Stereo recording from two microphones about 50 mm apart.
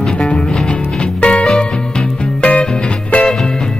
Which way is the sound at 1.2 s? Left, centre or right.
Left.